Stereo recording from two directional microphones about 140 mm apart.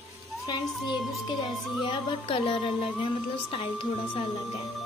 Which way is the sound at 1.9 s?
40° left (ahead or behind).